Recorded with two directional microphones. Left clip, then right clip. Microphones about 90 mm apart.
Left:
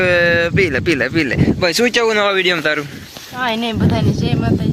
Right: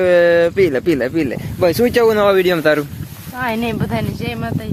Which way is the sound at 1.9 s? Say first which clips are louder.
Right 2 dB; 70° right (ahead or behind).